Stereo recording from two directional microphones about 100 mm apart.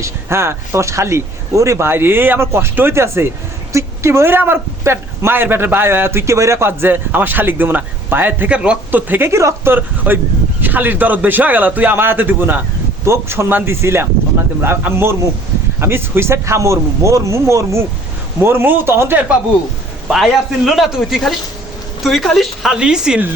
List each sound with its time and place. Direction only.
0.0 s speech: 25° right (ahead or behind)
9.7 s speech: 20° right (ahead or behind)
20.1 s a man's voice: centre (ahead or behind)